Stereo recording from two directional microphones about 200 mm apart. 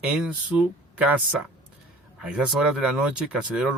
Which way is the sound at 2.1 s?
5° right (ahead or behind).